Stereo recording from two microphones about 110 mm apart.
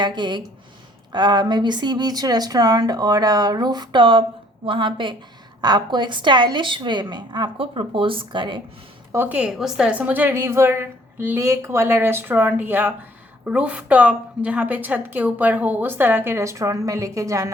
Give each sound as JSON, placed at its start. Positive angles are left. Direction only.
{"t": 0.0, "sound": "a woman's voice", "side_deg": -45}
{"t": 9.1, "sound": "a woman's voice", "side_deg": -20}
{"t": 9.4, "sound": "a woman's voice", "side_deg": -5}